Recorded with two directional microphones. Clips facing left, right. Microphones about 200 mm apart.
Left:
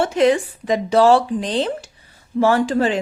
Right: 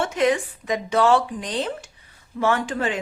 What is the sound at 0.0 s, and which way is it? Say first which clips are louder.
Speech: left 5 dB; 30° left (ahead or behind).